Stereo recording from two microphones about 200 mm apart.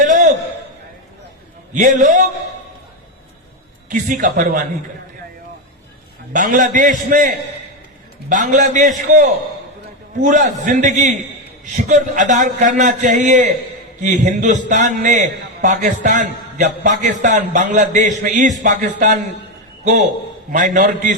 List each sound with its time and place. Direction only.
0.0 s a sound: 40° right (ahead or behind)
1.7 s a man's voice: 40° right (ahead or behind)
4.1 s a man's voice: 40° right (ahead or behind)
6.3 s a man's voice: 40° right (ahead or behind)
20.5 s a man's voice: 40° right (ahead or behind)